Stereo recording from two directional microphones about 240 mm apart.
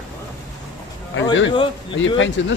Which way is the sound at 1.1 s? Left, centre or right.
Left.